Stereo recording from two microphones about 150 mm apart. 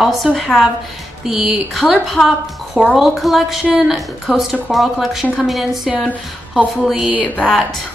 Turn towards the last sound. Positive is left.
turn(degrees=0)  # may be behind; listen again after turning